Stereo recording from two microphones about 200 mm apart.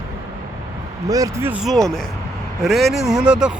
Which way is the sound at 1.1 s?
15° right (ahead or behind).